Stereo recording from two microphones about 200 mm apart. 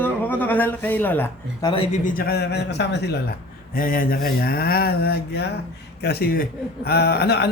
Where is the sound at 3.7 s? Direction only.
45° left (ahead or behind).